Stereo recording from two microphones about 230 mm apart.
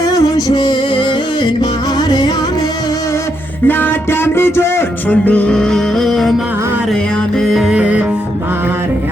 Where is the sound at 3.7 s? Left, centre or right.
Centre.